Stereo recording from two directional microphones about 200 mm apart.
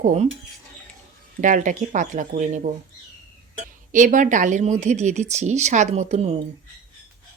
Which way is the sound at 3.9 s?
40° right (ahead or behind).